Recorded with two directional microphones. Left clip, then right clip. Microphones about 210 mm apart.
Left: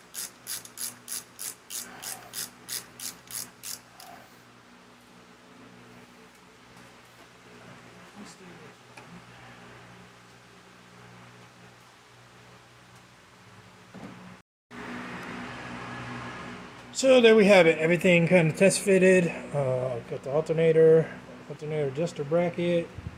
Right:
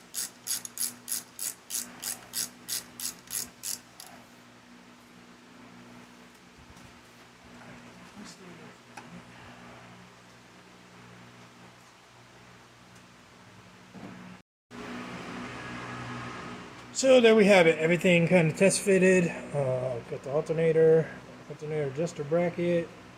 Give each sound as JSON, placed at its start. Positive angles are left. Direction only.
{"t": 16.9, "sound": "a man's voice", "side_deg": 5}